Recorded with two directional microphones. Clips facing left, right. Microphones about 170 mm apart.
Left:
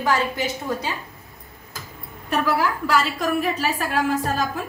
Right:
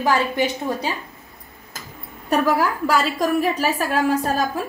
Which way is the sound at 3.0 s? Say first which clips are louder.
Right 3 dB; 40° right (ahead or behind).